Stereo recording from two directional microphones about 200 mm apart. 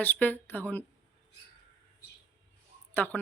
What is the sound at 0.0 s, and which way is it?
Speech, 10° left (ahead or behind).